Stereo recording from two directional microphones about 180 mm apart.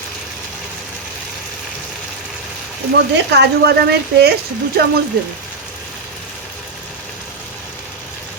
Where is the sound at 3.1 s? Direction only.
70° right (ahead or behind).